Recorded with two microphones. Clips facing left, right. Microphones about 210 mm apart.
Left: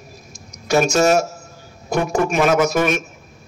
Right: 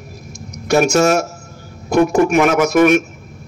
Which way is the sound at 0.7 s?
60° right (ahead or behind).